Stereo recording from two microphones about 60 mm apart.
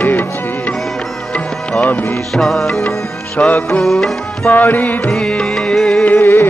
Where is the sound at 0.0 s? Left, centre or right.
Left.